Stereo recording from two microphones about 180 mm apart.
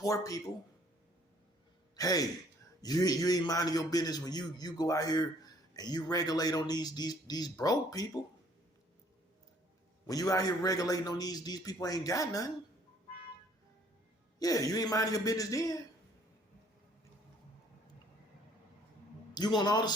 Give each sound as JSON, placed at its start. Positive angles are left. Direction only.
{"t": 0.0, "sound": "a man's voice", "side_deg": 20}
{"t": 2.0, "sound": "a man's voice", "side_deg": 20}
{"t": 10.1, "sound": "a man's voice", "side_deg": 20}
{"t": 14.3, "sound": "a man's voice", "side_deg": 20}
{"t": 19.3, "sound": "a man's voice", "side_deg": 25}